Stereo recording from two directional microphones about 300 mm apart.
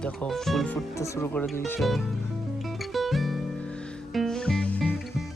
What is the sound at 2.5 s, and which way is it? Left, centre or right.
Music, centre.